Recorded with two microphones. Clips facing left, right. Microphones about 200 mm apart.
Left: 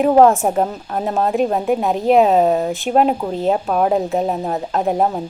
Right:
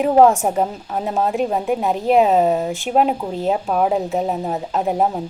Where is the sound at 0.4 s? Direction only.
Centre (ahead or behind).